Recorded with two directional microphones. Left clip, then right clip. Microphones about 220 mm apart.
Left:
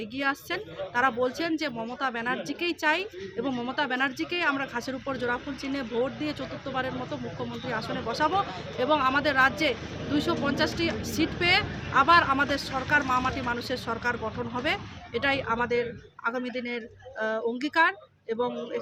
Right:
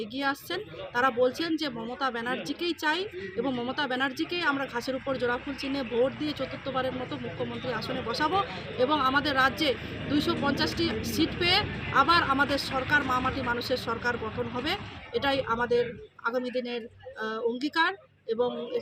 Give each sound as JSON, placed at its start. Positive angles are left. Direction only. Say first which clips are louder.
{"t": 0.0, "sound": "speech", "louder": "left 1 dB", "side_deg": 5}
{"t": 12.5, "sound": "speech", "louder": "even", "side_deg": 20}
{"t": 12.9, "sound": "speech", "louder": "left 2 dB", "side_deg": 5}